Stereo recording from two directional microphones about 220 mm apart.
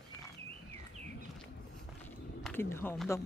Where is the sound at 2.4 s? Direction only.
10° left (ahead or behind).